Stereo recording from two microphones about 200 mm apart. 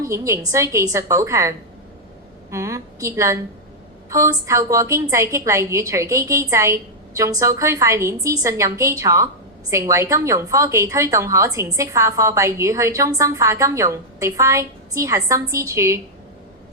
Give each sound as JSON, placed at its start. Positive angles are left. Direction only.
{"t": 0.0, "sound": "a woman's voice", "side_deg": -15}